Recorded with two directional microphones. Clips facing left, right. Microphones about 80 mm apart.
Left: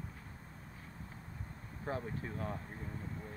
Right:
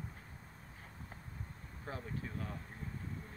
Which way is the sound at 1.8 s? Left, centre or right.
Left.